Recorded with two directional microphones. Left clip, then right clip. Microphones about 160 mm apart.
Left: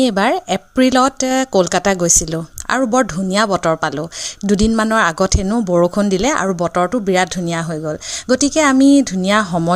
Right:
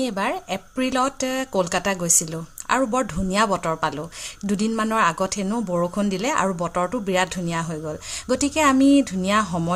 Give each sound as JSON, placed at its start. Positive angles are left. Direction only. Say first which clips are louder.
{"t": 0.0, "sound": "speech", "louder": "left 10 dB", "side_deg": 40}